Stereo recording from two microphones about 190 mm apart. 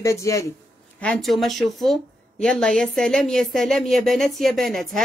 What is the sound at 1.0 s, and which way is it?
A woman's voice, 5° left (ahead or behind).